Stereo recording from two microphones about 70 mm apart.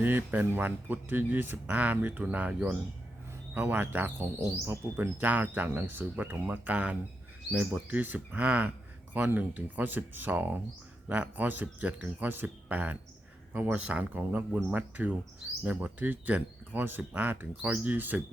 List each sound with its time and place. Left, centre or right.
0.0 s speech: right
4.4 s speech: right
4.9 s speech: right